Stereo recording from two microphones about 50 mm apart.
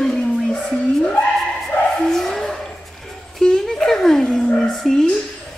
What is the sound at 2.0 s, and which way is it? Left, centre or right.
Bow-wow, centre.